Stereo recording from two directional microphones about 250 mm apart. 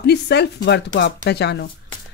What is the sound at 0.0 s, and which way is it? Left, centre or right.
Speech, left.